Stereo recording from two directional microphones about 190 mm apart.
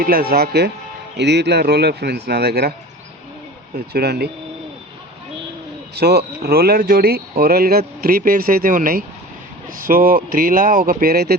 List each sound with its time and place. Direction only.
0.0 s speech: 50° right (ahead or behind)
3.9 s speech: 55° right (ahead or behind)
5.9 s speech: 55° right (ahead or behind)